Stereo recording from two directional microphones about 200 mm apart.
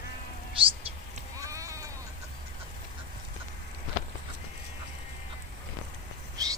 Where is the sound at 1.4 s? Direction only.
15° right (ahead or behind).